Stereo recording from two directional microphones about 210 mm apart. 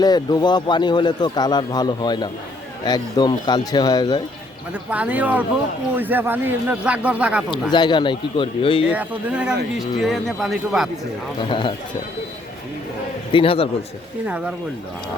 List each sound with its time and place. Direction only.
0.0 s a man's voice: 20° left (ahead or behind)
4.7 s a man's voice: 5° right (ahead or behind)
7.5 s a man's voice: 20° left (ahead or behind)
8.9 s speech: 5° right (ahead or behind)
11.3 s a man's voice: 25° left (ahead or behind)
13.3 s a man's voice: 25° left (ahead or behind)
14.3 s speech: 5° right (ahead or behind)